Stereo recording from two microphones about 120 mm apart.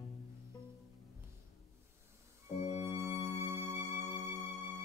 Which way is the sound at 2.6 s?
35° left (ahead or behind).